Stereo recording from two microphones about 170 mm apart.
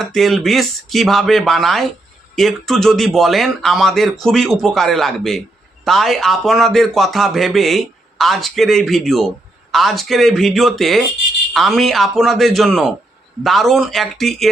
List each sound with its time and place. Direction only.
0.0 s a man's voice: centre (ahead or behind)